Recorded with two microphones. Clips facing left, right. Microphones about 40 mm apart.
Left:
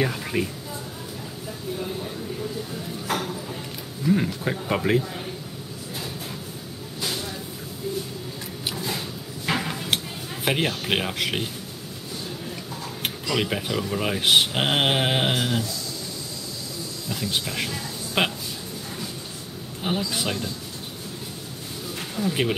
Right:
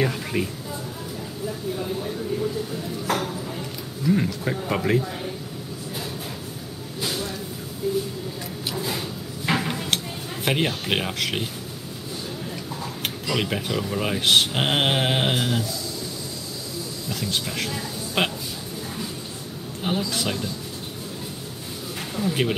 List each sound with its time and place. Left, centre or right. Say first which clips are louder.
0.0 s a sound: right 1 dB; centre
1.8 s speech: right 3 dB; centre
7.0 s vehicle: right 2 dB; centre
7.8 s a sound: right 5 dB; centre
10.4 s speech: even; centre
13.0 s speech: left 1 dB; centre
17.1 s speech: even; centre
19.8 s speech: right 1 dB; centre
22.1 s speech: even; centre